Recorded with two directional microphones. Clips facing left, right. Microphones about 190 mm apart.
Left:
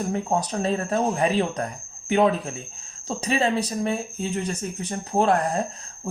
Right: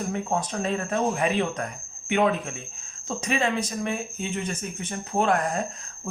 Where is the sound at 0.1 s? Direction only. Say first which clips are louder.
Left 3 dB; 40° left (ahead or behind).